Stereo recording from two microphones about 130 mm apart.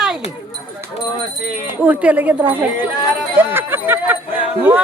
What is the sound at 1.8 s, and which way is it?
Speech, 10° right (ahead or behind).